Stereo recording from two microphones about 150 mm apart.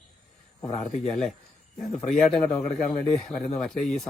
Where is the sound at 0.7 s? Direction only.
50° left (ahead or behind).